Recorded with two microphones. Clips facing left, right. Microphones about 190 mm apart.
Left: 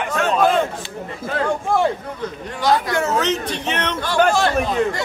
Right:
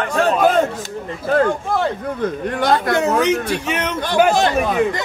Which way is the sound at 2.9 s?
15° right (ahead or behind).